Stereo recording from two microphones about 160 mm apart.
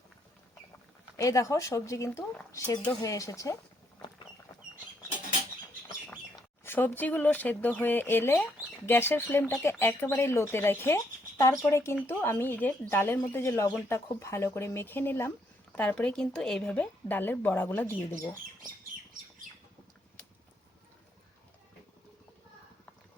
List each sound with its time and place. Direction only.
1.1 s speech: 20° left (ahead or behind)
6.7 s speech: 10° left (ahead or behind)